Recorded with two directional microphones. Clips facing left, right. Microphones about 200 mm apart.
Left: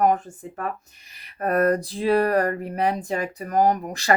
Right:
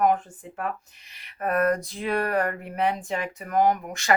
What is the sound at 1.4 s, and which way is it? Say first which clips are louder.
Speech: left 3 dB; 35° left (ahead or behind).